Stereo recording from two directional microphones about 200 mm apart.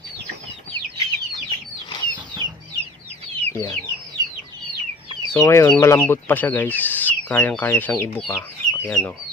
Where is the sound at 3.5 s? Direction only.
15° left (ahead or behind).